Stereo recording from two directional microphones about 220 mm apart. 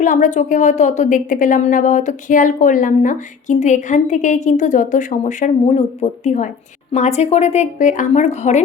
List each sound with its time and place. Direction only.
0.0 s a woman's voice: 35° left (ahead or behind)